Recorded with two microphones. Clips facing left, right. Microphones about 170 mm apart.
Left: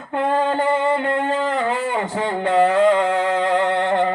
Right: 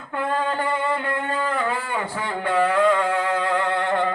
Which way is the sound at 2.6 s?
25° left (ahead or behind).